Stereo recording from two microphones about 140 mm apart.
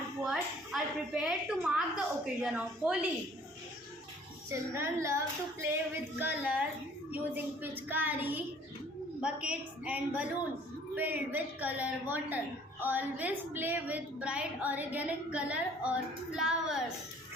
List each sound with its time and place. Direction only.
0.2 s a woman's voice: 5° right (ahead or behind)
4.4 s a woman's voice: 20° right (ahead or behind); by 16.8 s 5° right (ahead or behind)